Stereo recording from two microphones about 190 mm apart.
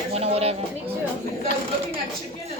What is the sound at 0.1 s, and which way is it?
Speech, 30° right (ahead or behind).